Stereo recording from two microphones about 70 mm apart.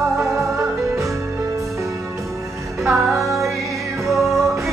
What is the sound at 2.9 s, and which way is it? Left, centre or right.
Music, right.